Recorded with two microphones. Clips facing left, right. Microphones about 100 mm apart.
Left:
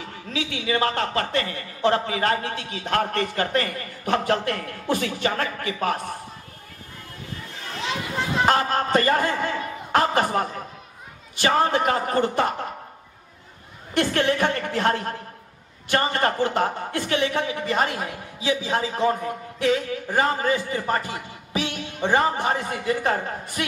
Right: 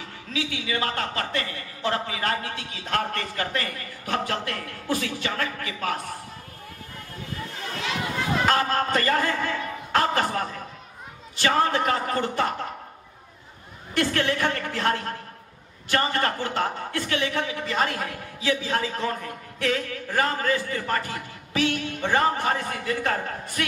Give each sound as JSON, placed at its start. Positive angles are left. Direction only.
{"t": 0.3, "sound": "a man's voice", "side_deg": 35}
{"t": 8.5, "sound": "a man's voice", "side_deg": 25}
{"t": 11.4, "sound": "a woman's voice", "side_deg": 20}
{"t": 13.9, "sound": "a woman's voice", "side_deg": 25}